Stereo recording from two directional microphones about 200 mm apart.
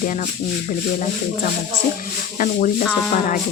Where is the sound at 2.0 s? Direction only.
40° left (ahead or behind).